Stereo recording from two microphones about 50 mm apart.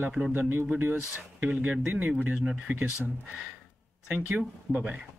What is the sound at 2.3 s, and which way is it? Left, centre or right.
Speech, centre.